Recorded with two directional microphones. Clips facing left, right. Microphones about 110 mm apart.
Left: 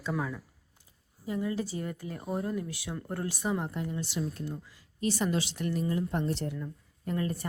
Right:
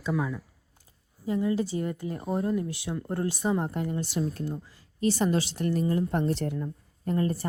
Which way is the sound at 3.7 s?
50° right (ahead or behind).